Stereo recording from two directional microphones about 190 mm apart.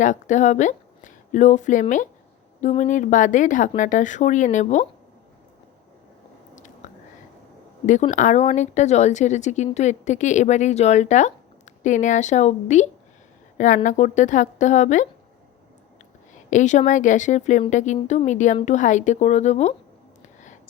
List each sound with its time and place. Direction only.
0.0 s a woman's voice: 40° left (ahead or behind)
6.8 s whispering: 40° left (ahead or behind)
8.1 s a woman's voice: 40° left (ahead or behind)
16.5 s a woman's voice: 40° left (ahead or behind)
20.2 s whispering: 40° left (ahead or behind)